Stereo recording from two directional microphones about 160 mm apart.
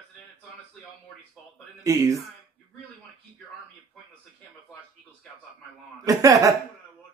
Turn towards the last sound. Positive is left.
turn(degrees=-20)  # may be behind; listen again after turning